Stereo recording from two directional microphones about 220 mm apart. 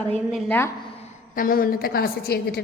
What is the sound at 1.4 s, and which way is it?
A woman's voice, 40° left (ahead or behind).